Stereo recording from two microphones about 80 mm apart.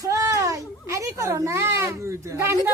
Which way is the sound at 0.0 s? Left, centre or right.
Right.